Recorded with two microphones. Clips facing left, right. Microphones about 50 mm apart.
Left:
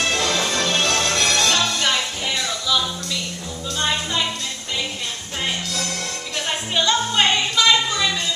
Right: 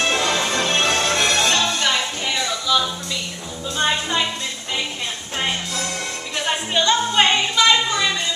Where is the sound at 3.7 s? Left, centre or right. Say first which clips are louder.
Right 2 dB; centre.